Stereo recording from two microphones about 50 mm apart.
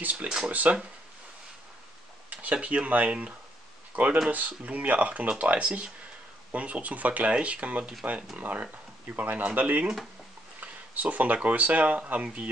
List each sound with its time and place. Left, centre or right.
0.0 s speech: right
2.4 s speech: right